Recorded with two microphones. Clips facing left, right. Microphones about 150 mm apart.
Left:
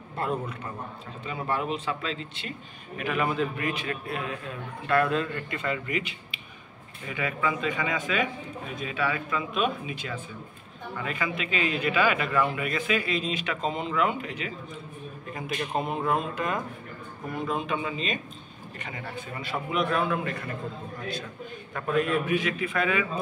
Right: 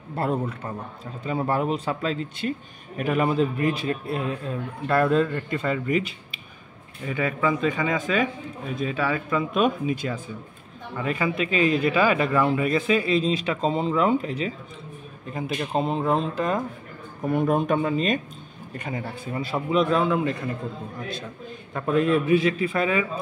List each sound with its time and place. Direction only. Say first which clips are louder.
0.1 s a man's voice: right 4 dB; 35° right (ahead or behind)
17.3 s a man's voice: right 8 dB; 55° right (ahead or behind); by 20.3 s 20° right (ahead or behind)
21.7 s a man's voice: right 5 dB; 25° right (ahead or behind)